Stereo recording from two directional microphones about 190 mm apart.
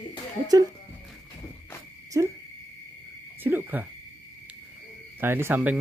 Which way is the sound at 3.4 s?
10° right (ahead or behind).